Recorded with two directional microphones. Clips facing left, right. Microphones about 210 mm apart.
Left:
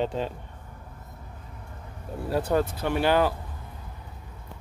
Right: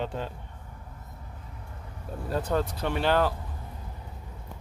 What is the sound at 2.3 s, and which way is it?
Speech, 10° left (ahead or behind).